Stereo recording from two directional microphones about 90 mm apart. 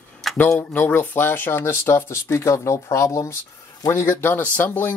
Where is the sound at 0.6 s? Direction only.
20° left (ahead or behind).